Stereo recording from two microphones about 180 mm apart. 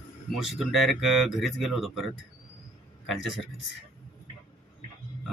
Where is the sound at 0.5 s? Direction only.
Centre (ahead or behind).